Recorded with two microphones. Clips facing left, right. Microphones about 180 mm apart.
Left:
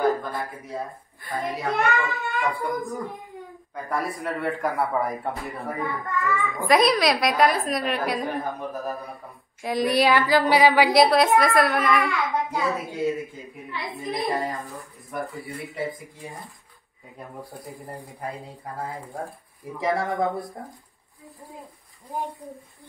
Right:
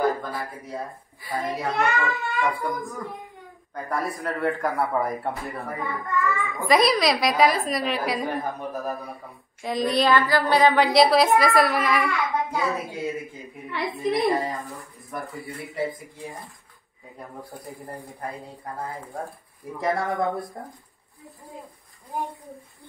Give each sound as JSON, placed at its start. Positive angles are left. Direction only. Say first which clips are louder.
{"t": 0.0, "sound": "a child's voice", "louder": "left 1 dB", "side_deg": 0}
{"t": 10.1, "sound": "a sound", "louder": "left 1 dB", "side_deg": 20}
{"t": 10.6, "sound": "a child's voice", "louder": "right 2 dB", "side_deg": 5}
{"t": 19.8, "sound": "a child's voice", "louder": "even", "side_deg": 0}